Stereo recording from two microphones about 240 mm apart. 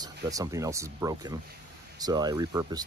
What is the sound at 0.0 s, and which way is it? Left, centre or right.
Speech, centre.